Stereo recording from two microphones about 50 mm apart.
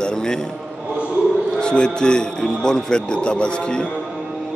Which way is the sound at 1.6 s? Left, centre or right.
Centre.